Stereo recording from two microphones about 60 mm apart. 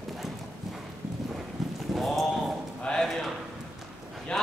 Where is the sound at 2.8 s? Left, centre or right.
Centre.